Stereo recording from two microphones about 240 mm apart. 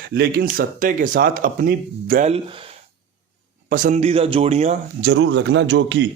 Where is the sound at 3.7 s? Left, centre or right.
Right.